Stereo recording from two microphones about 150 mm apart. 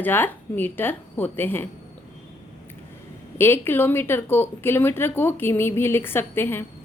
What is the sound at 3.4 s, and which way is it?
Speech, 15° left (ahead or behind).